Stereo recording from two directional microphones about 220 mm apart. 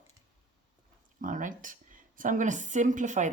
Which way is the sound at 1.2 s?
35° right (ahead or behind).